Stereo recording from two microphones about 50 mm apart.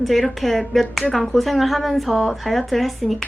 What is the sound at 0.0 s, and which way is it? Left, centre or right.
A woman's voice, centre.